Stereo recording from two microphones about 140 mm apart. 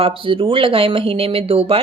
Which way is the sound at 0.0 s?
40° right (ahead or behind).